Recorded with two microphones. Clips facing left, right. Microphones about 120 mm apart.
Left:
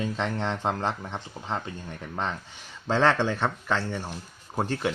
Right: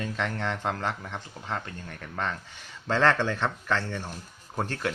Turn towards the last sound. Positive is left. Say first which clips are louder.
# left 3 dB
turn(degrees=10)  # may be behind; listen again after turning